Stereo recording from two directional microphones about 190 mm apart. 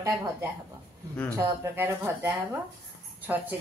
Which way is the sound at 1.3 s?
10° right (ahead or behind).